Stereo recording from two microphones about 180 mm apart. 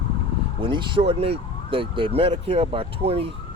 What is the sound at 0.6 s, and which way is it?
Speech, 30° right (ahead or behind).